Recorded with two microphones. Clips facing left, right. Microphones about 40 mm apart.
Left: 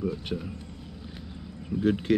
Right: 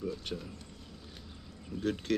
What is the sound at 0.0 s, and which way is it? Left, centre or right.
Speech, centre.